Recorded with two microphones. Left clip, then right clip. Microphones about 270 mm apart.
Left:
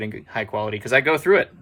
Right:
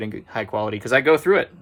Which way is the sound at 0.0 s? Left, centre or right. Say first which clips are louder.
Even; centre.